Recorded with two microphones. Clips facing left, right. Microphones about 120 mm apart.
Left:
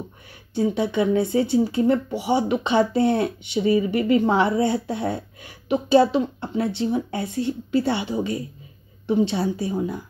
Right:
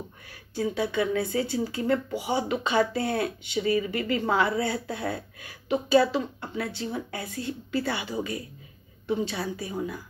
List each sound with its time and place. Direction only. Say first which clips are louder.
0.3 s speech: left 6 dB; 20° left (ahead or behind)